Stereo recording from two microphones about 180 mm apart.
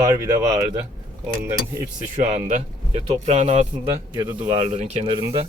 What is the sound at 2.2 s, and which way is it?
Speech, 35° right (ahead or behind).